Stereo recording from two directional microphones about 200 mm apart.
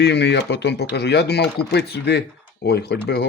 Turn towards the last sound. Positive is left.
turn(degrees=55)  # may be behind; listen again after turning